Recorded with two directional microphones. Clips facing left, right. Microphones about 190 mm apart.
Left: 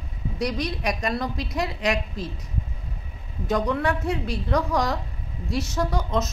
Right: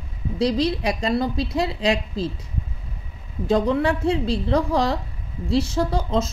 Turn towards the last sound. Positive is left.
turn(degrees=-30)  # may be behind; listen again after turning